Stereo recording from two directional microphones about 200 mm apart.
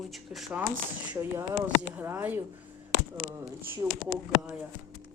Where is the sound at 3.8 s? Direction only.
15° right (ahead or behind).